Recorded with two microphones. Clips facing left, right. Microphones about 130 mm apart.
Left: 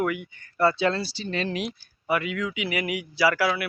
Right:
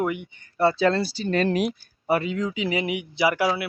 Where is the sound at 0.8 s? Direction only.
45° right (ahead or behind).